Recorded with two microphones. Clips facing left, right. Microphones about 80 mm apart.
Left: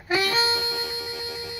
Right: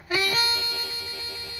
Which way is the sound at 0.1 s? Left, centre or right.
Left.